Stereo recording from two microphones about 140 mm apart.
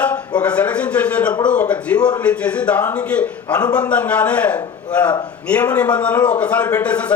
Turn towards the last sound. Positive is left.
turn(degrees=10)  # may be behind; listen again after turning